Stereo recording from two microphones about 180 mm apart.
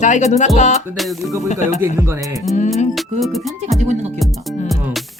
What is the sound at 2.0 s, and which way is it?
Music, 15° right (ahead or behind).